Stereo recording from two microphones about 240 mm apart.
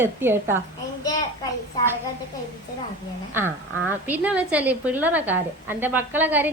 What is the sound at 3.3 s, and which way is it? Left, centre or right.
A woman's voice, centre.